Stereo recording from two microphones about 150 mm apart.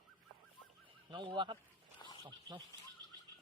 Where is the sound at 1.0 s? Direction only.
30° right (ahead or behind).